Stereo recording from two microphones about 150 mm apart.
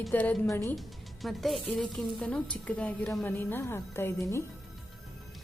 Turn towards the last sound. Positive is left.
turn(degrees=15)  # may be behind; listen again after turning